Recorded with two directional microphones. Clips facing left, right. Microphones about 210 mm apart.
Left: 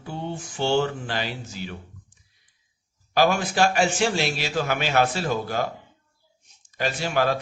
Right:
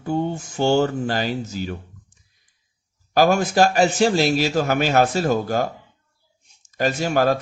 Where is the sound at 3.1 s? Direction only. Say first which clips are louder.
Right 4 dB; 45° right (ahead or behind).